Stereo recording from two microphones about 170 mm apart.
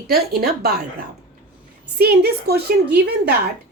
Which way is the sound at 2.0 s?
70° right (ahead or behind).